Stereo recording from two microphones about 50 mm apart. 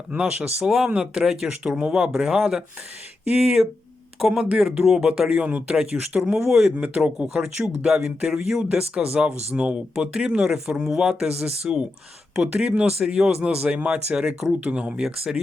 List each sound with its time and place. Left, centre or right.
0.2 s speech: right
3.2 s speech: right
4.2 s speech: centre
4.5 s speech: centre
6.4 s speech: centre
6.7 s speech: right; by 8.6 s centre
8.7 s speech: right
14.6 s speech: right
14.9 s speech: centre